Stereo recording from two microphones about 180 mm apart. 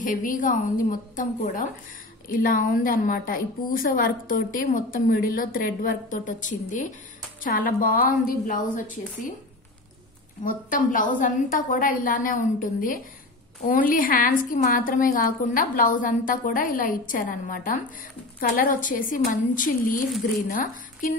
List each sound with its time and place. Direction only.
0.0 s a woman's voice: 45° left (ahead or behind)
10.4 s a woman's voice: 50° left (ahead or behind)